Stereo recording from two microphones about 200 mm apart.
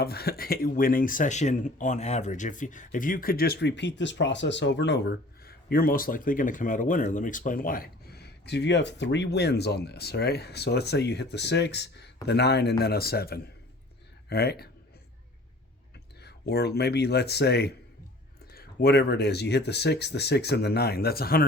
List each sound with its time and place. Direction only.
0.0 s speech: 50° left (ahead or behind)
16.2 s speech: 55° left (ahead or behind)